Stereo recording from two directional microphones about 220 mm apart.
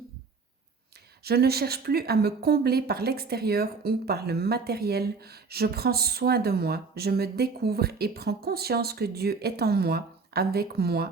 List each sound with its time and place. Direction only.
1.2 s speech: 45° right (ahead or behind)